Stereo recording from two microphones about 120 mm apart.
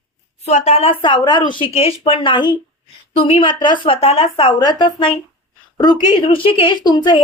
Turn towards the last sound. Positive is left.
turn(degrees=35)  # may be behind; listen again after turning